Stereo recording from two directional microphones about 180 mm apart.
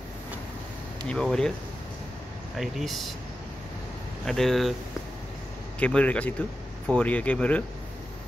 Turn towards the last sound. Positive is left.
turn(degrees=5)  # may be behind; listen again after turning